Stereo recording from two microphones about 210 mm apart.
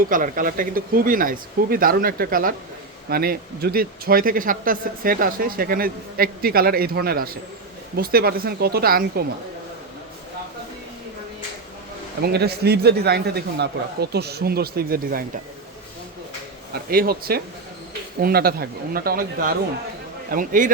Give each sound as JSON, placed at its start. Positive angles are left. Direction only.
{"t": 0.1, "sound": "speech", "side_deg": -40}
{"t": 12.2, "sound": "speech", "side_deg": -50}
{"t": 16.9, "sound": "speech", "side_deg": -45}